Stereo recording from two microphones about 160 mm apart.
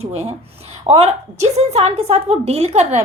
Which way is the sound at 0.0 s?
40° right (ahead or behind).